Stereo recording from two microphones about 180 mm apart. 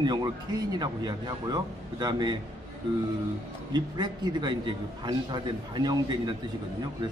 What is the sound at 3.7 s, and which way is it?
Speech, 25° right (ahead or behind).